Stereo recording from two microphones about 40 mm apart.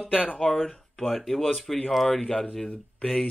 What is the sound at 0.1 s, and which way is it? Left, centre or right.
Speech, left.